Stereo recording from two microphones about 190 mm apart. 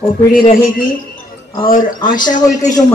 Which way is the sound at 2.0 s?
20° left (ahead or behind).